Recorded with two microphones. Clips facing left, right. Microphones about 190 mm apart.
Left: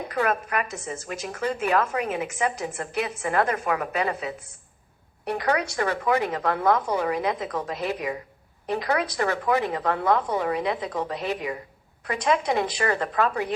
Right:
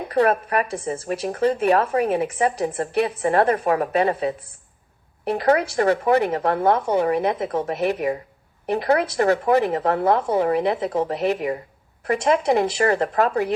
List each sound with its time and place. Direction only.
0.1 s a woman's voice: 30° right (ahead or behind)
12.2 s a woman's voice: 30° right (ahead or behind)